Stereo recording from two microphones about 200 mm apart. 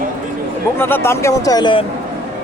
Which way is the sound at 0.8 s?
10° left (ahead or behind).